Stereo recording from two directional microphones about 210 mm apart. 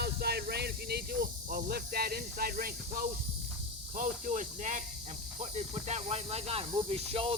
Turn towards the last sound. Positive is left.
turn(degrees=-25)  # may be behind; listen again after turning